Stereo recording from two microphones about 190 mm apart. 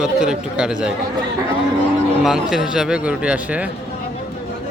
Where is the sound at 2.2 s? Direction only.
Centre (ahead or behind).